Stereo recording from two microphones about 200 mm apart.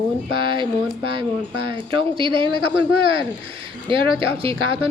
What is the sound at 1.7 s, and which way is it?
Speech, 25° right (ahead or behind).